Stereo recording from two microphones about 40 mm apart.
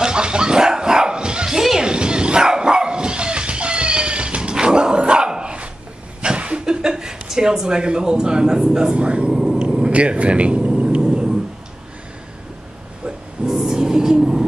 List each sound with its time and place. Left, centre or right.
0.0 s dog: right
1.9 s dog: right
6.2 s chuckle: right
6.6 s speech: centre
8.9 s speech: right
9.9 s speech: right
11.0 s dog: centre
13.0 s a sound: centre